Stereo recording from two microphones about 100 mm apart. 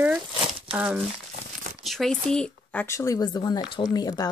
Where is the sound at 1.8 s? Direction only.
Centre (ahead or behind).